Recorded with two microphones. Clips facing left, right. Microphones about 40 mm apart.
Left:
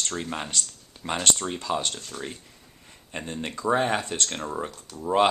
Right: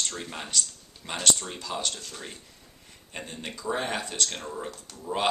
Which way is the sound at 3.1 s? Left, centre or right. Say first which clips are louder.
Left 5 dB; centre.